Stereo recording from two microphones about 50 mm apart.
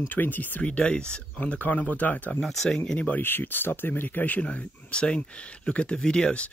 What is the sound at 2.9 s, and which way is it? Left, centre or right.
Speech, left.